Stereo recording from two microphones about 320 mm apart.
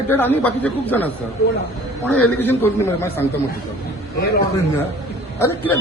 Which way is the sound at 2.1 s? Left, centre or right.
Left.